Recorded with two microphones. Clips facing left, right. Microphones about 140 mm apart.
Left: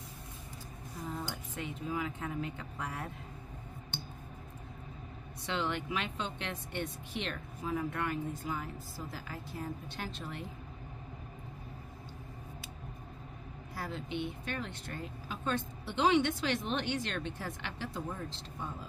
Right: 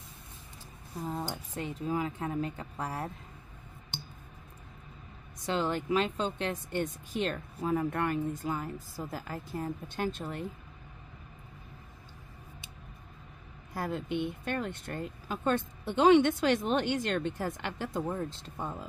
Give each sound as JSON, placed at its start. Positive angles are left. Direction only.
{"t": 1.3, "sound": "a woman's voice", "side_deg": -35}
{"t": 5.4, "sound": "a woman's voice", "side_deg": -40}
{"t": 13.7, "sound": "speech", "side_deg": -50}